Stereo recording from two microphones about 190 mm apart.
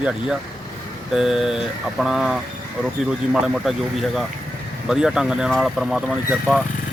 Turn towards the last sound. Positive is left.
turn(degrees=-5)  # may be behind; listen again after turning